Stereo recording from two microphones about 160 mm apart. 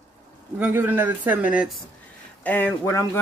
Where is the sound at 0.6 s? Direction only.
10° right (ahead or behind).